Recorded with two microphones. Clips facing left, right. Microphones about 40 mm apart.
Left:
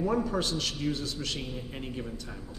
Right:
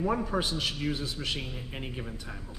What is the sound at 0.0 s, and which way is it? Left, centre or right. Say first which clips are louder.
A man's voice: left 1 dB; centre.